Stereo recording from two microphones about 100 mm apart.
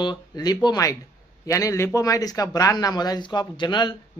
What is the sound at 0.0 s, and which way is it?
Speech, 45° left (ahead or behind).